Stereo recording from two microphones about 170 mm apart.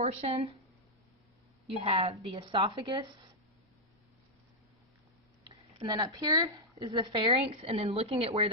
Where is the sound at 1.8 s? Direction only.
30° right (ahead or behind).